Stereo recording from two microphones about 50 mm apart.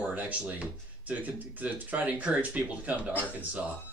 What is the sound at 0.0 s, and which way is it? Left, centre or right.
Speech, right.